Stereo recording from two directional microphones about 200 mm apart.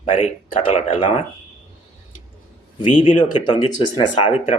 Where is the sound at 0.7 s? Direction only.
30° left (ahead or behind).